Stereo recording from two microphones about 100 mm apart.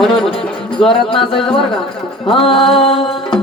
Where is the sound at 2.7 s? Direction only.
70° left (ahead or behind).